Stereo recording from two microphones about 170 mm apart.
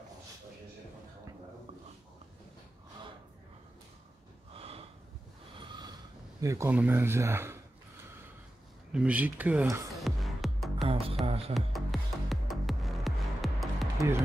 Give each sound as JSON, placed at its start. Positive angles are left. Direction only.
{"t": 4.6, "sound": "snort", "side_deg": -35}
{"t": 6.4, "sound": "speech", "side_deg": -15}
{"t": 8.9, "sound": "speech", "side_deg": -10}
{"t": 9.9, "sound": "music", "side_deg": 0}
{"t": 10.9, "sound": "music", "side_deg": -35}
{"t": 11.5, "sound": "music", "side_deg": 0}